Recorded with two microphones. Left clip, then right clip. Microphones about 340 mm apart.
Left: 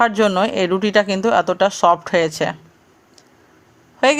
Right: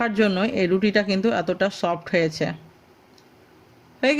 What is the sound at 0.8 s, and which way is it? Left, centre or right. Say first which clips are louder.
A woman's voice: left 5 dB; left.